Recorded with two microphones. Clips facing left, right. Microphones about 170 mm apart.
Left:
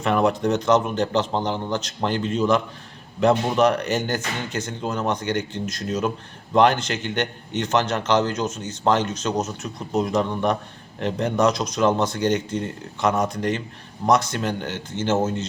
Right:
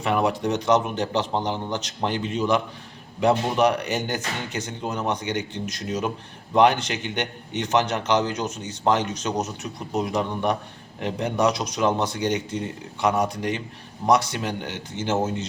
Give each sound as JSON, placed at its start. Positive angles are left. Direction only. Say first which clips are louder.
{"t": 0.0, "sound": "a man's voice", "louder": "left 3 dB", "side_deg": -10}